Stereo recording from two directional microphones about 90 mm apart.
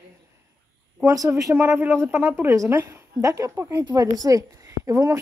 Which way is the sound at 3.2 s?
35° right (ahead or behind).